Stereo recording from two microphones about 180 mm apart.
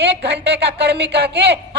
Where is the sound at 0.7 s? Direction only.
65° right (ahead or behind).